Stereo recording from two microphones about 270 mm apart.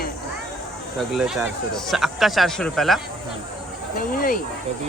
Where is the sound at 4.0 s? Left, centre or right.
Left.